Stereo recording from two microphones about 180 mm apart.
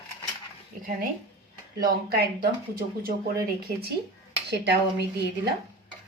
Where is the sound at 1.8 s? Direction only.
55° right (ahead or behind).